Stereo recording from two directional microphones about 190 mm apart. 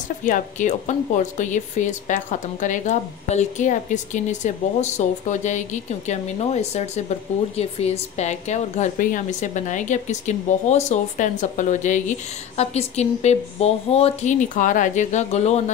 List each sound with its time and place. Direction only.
0.2 s a woman's voice: 40° left (ahead or behind)